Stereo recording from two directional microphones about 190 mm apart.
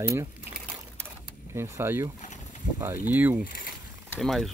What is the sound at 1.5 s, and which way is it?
Speech, 15° right (ahead or behind).